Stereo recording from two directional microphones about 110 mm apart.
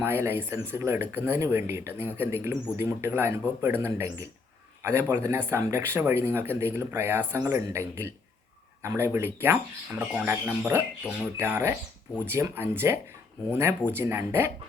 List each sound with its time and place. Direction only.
0.0 s a man's voice: 20° right (ahead or behind)